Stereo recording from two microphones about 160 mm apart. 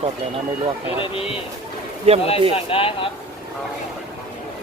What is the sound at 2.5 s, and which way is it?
Speech, 35° left (ahead or behind).